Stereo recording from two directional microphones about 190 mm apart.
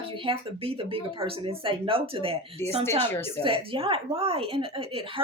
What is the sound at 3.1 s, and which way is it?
Speech, 10° left (ahead or behind).